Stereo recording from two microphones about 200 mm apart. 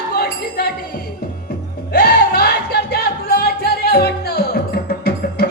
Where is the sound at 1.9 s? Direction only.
55° left (ahead or behind).